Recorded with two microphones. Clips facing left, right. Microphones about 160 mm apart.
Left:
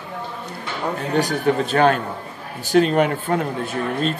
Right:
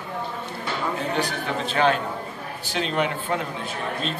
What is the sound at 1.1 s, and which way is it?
Speech, 45° left (ahead or behind).